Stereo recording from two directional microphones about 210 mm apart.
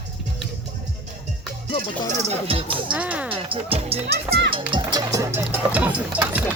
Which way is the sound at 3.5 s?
25° right (ahead or behind).